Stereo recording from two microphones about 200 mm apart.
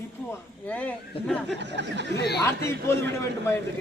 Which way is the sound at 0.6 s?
5° left (ahead or behind).